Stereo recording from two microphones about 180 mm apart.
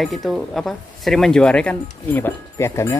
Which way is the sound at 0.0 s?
Centre (ahead or behind).